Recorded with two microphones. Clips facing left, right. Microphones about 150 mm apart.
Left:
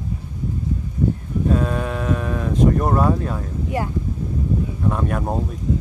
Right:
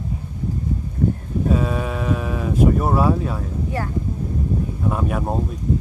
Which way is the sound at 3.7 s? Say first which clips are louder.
Left 4 dB; 15° left (ahead or behind).